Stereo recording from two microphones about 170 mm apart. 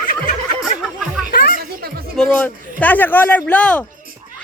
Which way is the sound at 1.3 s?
60° left (ahead or behind).